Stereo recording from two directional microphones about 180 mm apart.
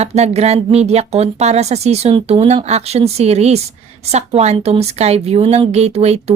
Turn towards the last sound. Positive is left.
turn(degrees=-35)  # may be behind; listen again after turning